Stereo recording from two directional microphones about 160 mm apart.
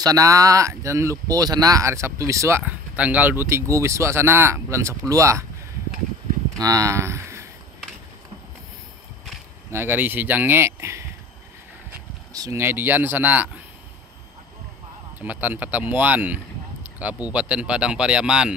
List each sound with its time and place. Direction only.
0.0 s speech: 20° right (ahead or behind)
6.6 s speech: 20° right (ahead or behind)
9.7 s speech: 15° right (ahead or behind)
12.3 s speech: 20° right (ahead or behind)
15.1 s speech: 10° right (ahead or behind)